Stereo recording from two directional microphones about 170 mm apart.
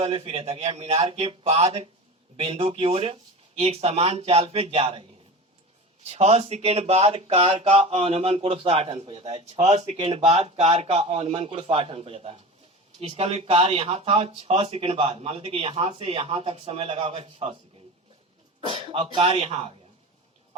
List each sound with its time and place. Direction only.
0.0 s speech: 35° right (ahead or behind)
18.7 s speech: 30° right (ahead or behind)